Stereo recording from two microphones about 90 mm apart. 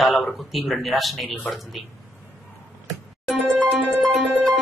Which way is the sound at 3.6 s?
20° right (ahead or behind).